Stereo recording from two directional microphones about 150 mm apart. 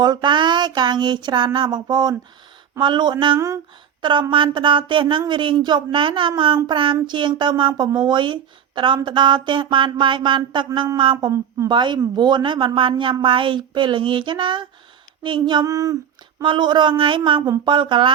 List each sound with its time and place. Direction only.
0.0 s a woman's voice: 30° right (ahead or behind)
1.5 s a sound: 30° right (ahead or behind)
2.7 s a woman's voice: 30° right (ahead or behind)
3.3 s a sound: 20° right (ahead or behind)
4.0 s a woman's voice: 30° right (ahead or behind)
16.4 s a woman's voice: 30° right (ahead or behind)